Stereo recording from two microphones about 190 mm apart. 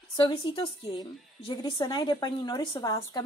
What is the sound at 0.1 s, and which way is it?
A woman's voice, 25° left (ahead or behind).